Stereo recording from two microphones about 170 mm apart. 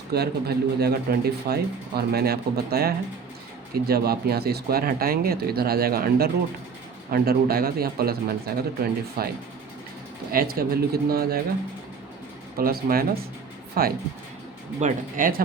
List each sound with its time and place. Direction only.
0.1 s speech: 70° right (ahead or behind)
10.3 s speech: 60° right (ahead or behind)
12.5 s speech: 60° right (ahead or behind)
14.8 s speech: 50° right (ahead or behind)